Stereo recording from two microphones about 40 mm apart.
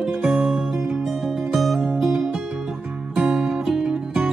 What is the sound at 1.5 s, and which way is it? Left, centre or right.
Music, centre.